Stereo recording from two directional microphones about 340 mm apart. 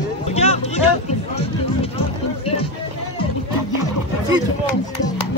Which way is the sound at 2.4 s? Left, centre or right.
Centre.